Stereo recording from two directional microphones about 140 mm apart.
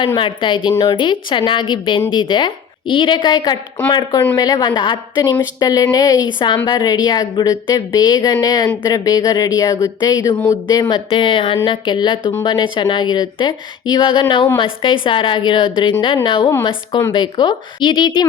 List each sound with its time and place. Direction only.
0.2 s a woman's voice: 35° left (ahead or behind)